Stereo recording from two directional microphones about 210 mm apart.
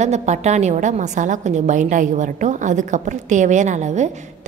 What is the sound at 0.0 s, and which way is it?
A woman's voice, 35° right (ahead or behind).